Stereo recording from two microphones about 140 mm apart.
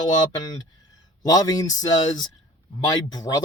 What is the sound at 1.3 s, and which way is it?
Speech, 25° left (ahead or behind).